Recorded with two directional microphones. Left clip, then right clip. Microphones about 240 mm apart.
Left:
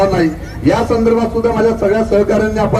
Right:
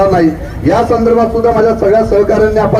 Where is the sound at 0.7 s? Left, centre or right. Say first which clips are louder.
Right 3 dB; left.